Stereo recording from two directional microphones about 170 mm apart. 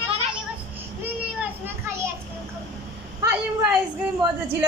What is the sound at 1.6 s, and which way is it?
Children playing, 15° right (ahead or behind).